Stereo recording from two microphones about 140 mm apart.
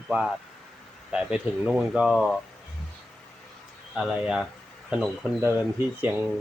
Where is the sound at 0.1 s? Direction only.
Centre (ahead or behind).